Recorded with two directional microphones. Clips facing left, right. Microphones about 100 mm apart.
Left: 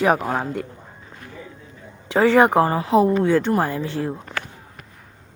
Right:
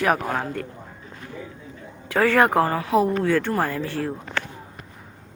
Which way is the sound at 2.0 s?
20° left (ahead or behind).